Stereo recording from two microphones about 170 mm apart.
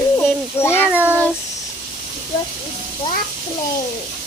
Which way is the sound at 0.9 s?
10° right (ahead or behind).